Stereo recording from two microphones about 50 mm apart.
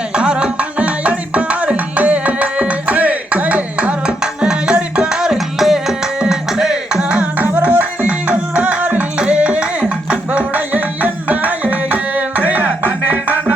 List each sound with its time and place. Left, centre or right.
0.2 s music: centre
7.3 s music: right